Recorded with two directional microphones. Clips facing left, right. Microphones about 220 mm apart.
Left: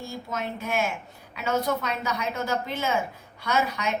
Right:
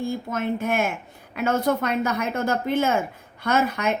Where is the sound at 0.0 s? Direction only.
55° right (ahead or behind).